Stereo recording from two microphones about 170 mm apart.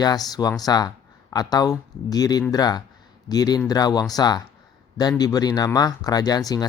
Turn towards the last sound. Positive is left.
turn(degrees=20)  # may be behind; listen again after turning